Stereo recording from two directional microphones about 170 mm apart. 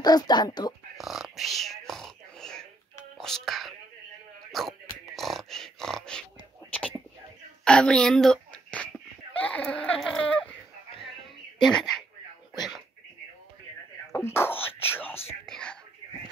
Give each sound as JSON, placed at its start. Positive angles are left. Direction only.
{"t": 0.0, "sound": "speech", "side_deg": 25}
{"t": 0.9, "sound": "a sound", "side_deg": 0}
{"t": 3.2, "sound": "speech", "side_deg": 5}
{"t": 4.5, "sound": "a sound", "side_deg": 0}
{"t": 7.6, "sound": "a child's voice", "side_deg": 5}
{"t": 11.6, "sound": "speech", "side_deg": 0}
{"t": 14.1, "sound": "speech", "side_deg": 15}
{"t": 15.4, "sound": "whispering", "side_deg": 5}